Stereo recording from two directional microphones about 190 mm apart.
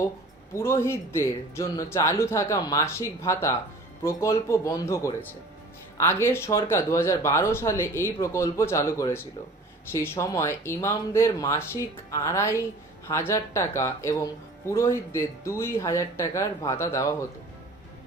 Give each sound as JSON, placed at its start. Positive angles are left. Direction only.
{"t": 0.5, "sound": "speech", "side_deg": 15}